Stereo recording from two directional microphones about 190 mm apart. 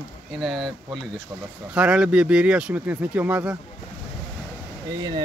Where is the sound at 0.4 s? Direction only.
Centre (ahead or behind).